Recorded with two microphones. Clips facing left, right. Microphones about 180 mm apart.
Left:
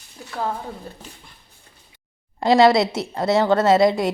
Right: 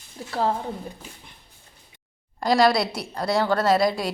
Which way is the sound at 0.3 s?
30° right (ahead or behind).